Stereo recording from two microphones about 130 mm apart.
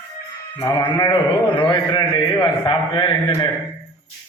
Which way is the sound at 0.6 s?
30° left (ahead or behind).